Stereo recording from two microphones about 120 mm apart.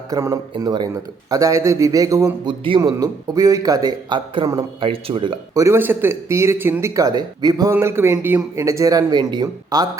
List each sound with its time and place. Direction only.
0.1 s speech: 25° right (ahead or behind)
0.5 s speech: 35° right (ahead or behind)
2.4 s speech: 40° right (ahead or behind)
2.9 s speech: 30° right (ahead or behind)
4.8 s speech: 50° right (ahead or behind)
5.5 s speech: 20° right (ahead or behind)
7.7 s speech: 20° right (ahead or behind)